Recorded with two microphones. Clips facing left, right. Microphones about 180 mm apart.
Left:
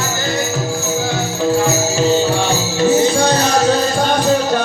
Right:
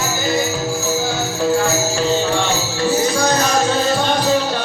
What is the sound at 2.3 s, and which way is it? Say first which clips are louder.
Music: left 2 dB; 20° left (ahead or behind).